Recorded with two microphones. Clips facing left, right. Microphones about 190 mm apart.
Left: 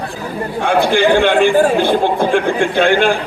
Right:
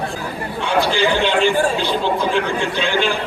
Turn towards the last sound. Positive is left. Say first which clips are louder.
# left 7 dB
turn(degrees=55)  # may be behind; listen again after turning